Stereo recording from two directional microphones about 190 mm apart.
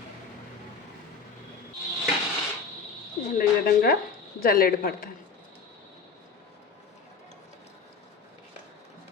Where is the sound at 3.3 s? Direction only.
50° left (ahead or behind).